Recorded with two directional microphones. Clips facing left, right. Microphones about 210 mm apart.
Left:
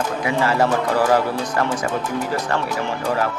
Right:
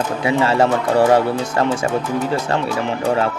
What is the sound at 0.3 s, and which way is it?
Speech, 25° right (ahead or behind).